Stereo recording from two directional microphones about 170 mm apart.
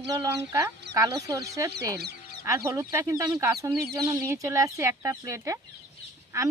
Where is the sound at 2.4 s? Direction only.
15° right (ahead or behind).